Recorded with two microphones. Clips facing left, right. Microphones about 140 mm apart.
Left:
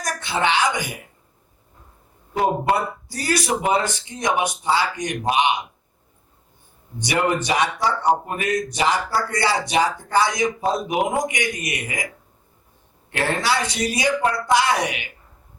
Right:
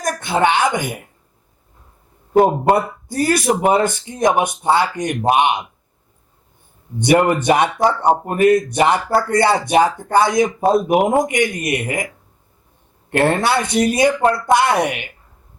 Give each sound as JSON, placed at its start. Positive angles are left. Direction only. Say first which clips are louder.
{"t": 0.0, "sound": "a woman's voice", "louder": "right 6 dB", "side_deg": -50}
{"t": 2.3, "sound": "speech", "louder": "right 7 dB", "side_deg": -50}
{"t": 7.0, "sound": "speech", "louder": "right 7 dB", "side_deg": -55}
{"t": 13.1, "sound": "speech", "louder": "right 6 dB", "side_deg": -55}